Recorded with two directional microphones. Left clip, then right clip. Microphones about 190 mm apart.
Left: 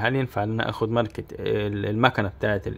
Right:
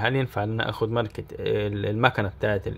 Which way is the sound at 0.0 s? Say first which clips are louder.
Left 1 dB; 10° left (ahead or behind).